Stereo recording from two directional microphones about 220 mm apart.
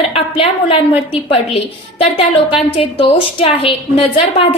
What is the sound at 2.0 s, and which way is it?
A woman's voice, 25° left (ahead or behind).